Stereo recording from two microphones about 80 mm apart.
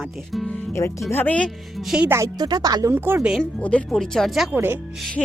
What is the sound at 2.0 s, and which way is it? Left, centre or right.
Speech, right.